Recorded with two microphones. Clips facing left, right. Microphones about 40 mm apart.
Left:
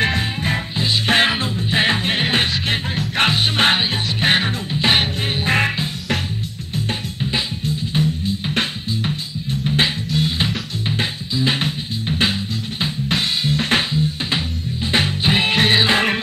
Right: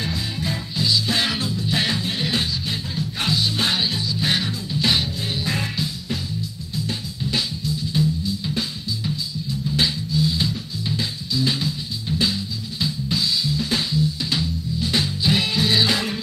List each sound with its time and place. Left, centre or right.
0.0 s music: left
2.5 s music: left
7.6 s music: left